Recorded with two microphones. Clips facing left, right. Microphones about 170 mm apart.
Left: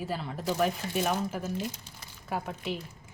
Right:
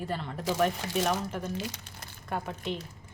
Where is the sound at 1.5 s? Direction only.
75° right (ahead or behind).